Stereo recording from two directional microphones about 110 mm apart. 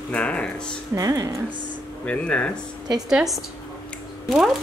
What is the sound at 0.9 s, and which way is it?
Speech, 30° right (ahead or behind).